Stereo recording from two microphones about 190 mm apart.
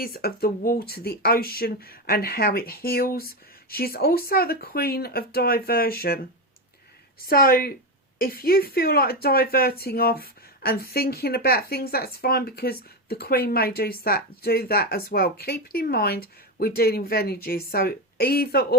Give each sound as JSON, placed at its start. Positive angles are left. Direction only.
{"t": 0.0, "sound": "speech", "side_deg": 55}
{"t": 7.3, "sound": "speech", "side_deg": 50}